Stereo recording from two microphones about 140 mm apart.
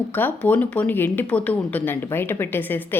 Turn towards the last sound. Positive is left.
turn(degrees=15)  # may be behind; listen again after turning